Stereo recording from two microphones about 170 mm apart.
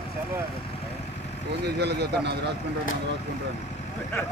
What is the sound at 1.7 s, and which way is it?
Speech, 75° right (ahead or behind).